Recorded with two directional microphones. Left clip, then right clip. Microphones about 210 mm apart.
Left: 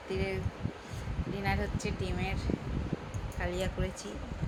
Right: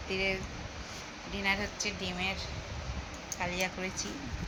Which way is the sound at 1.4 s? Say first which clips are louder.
Right 3 dB; 20° left (ahead or behind).